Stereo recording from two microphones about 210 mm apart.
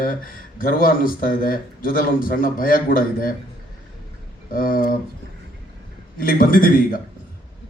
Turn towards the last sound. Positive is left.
turn(degrees=40)  # may be behind; listen again after turning